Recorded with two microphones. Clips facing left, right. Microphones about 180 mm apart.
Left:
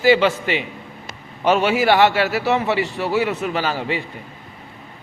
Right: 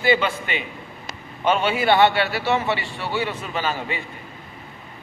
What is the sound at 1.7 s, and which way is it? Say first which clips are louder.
A man's voice: left 2 dB; 80° left.